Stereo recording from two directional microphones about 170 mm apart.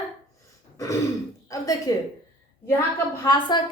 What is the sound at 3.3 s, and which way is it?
Speech, 25° left (ahead or behind).